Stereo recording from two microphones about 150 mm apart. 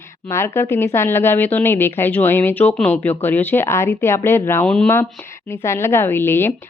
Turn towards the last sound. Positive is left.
turn(degrees=15)  # may be behind; listen again after turning